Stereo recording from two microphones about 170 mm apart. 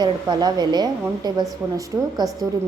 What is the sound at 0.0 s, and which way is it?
A woman's voice, 25° right (ahead or behind).